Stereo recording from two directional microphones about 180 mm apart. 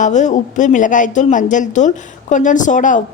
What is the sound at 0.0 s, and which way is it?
A woman's voice, 40° left (ahead or behind).